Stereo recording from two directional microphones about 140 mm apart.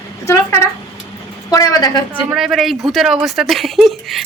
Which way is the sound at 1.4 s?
25° left (ahead or behind).